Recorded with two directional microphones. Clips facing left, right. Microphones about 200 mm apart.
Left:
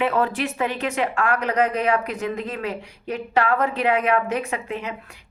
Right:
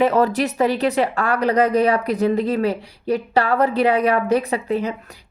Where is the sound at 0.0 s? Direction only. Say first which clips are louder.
Right 5 dB; 40° right (ahead or behind).